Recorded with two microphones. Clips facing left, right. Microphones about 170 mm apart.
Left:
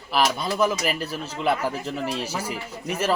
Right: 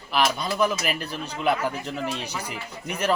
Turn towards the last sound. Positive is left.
turn(degrees=35)  # may be behind; listen again after turning